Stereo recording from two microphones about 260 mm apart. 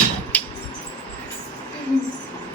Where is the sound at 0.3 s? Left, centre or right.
Centre.